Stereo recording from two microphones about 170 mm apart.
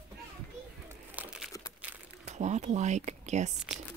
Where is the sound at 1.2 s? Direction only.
10° right (ahead or behind).